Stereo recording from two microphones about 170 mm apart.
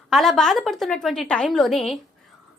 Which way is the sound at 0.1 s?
Centre (ahead or behind).